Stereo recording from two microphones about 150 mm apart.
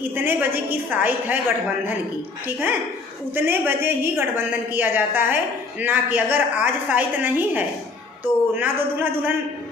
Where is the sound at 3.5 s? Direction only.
15° right (ahead or behind).